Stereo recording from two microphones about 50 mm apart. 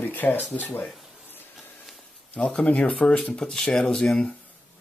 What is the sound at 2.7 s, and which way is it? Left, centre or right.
Speech, left.